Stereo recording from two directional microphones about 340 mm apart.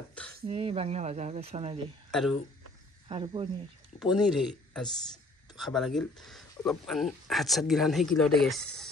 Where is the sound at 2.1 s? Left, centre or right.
Centre.